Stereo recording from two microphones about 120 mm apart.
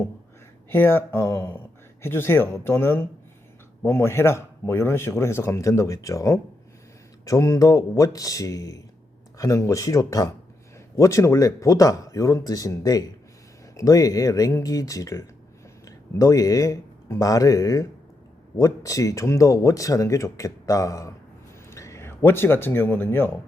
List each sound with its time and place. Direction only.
0.7 s a man's voice: 20° left (ahead or behind)